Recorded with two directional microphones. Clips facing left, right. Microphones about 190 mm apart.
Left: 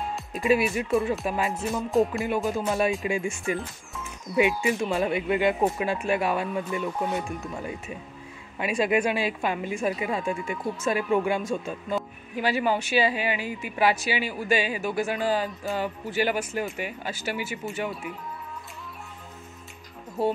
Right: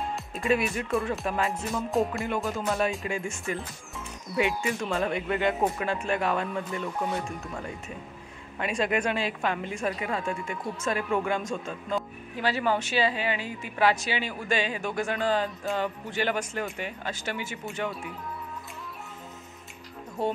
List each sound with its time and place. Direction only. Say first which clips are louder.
0.5 s speech: left 3 dB; 5° left (ahead or behind)
2.6 s a woman's voice: left 3 dB; 15° left (ahead or behind)
20.2 s speech: left 3 dB; 5° left (ahead or behind)